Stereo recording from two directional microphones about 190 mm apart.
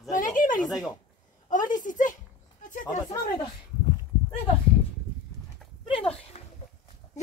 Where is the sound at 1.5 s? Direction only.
45° left (ahead or behind).